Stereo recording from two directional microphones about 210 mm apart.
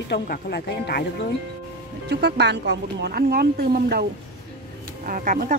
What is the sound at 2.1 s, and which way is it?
Speech, 50° right (ahead or behind).